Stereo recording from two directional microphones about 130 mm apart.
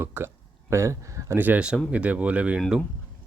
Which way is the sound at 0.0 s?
15° right (ahead or behind).